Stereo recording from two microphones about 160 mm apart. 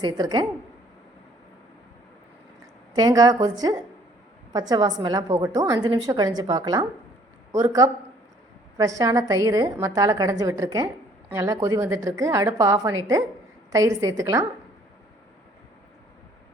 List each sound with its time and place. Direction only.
0.0 s a woman's voice: 25° right (ahead or behind)
2.9 s a woman's voice: 25° right (ahead or behind)